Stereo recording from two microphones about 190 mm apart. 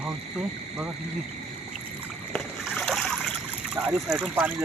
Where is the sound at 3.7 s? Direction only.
Centre (ahead or behind).